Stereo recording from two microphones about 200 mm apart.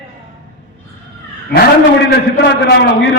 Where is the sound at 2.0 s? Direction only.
60° left (ahead or behind).